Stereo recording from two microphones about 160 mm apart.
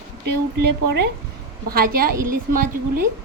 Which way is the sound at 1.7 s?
65° right (ahead or behind).